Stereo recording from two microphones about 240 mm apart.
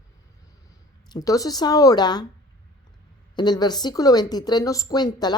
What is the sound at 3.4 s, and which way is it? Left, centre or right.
Speech, centre.